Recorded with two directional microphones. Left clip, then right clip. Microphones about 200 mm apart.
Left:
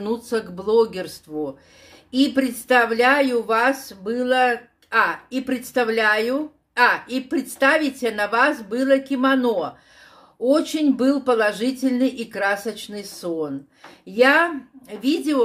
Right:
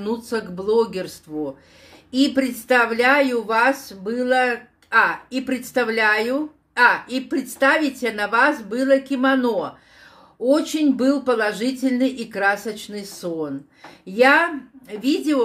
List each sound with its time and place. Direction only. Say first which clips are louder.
0.0 s speech: left 1 dB; 5° left (ahead or behind)